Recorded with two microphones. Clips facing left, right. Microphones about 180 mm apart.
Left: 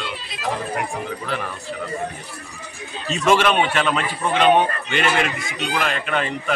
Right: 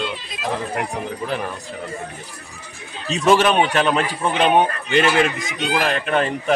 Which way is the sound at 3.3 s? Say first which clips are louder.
Right 2 dB; 40° right (ahead or behind).